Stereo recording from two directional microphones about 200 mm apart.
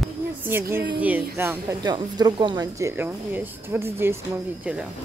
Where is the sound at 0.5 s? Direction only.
10° right (ahead or behind).